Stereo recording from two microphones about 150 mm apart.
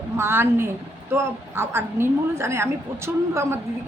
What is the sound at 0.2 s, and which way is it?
A woman's voice, 15° right (ahead or behind).